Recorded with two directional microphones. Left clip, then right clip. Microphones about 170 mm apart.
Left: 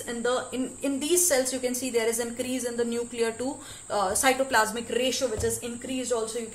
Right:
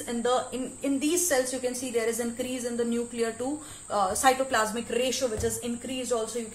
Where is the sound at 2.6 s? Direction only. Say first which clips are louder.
Left 1 dB; 50° left (ahead or behind); by 6.3 s 25° left (ahead or behind).